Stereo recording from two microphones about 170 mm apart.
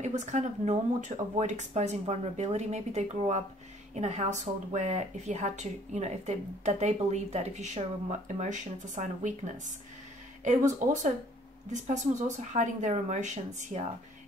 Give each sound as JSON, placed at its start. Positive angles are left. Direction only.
{"t": 0.0, "sound": "a woman's voice", "side_deg": -45}
{"t": 11.7, "sound": "a woman's voice", "side_deg": -45}